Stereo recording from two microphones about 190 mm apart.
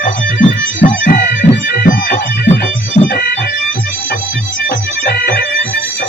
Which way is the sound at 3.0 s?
50° left (ahead or behind).